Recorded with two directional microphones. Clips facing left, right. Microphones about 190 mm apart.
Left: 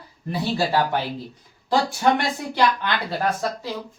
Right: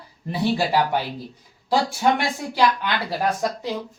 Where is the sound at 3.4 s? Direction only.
15° right (ahead or behind).